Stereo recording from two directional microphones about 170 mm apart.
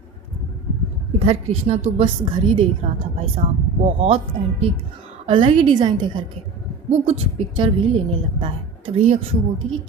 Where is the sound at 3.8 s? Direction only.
35° right (ahead or behind).